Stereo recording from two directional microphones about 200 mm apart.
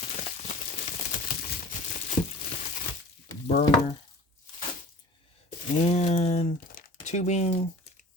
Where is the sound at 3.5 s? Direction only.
35° left (ahead or behind).